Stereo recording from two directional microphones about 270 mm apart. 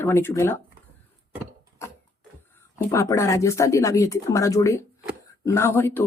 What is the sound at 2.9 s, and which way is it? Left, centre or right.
Speech, centre.